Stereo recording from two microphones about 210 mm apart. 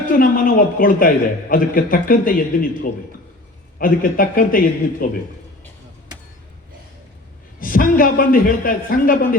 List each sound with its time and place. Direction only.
0.1 s a man's voice: 45° left (ahead or behind)
3.8 s a man's voice: 40° left (ahead or behind)
7.6 s a man's voice: 40° left (ahead or behind)